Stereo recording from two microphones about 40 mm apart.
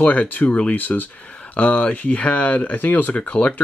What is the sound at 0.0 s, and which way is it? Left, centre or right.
Speech, left.